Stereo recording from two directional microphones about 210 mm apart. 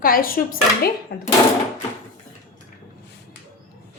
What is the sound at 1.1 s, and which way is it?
Speech, 55° left (ahead or behind).